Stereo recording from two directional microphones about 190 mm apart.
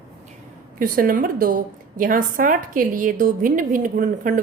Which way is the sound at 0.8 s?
50° right (ahead or behind).